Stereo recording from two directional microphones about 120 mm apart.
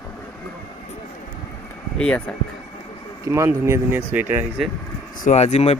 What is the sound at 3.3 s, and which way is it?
Speech, 25° right (ahead or behind).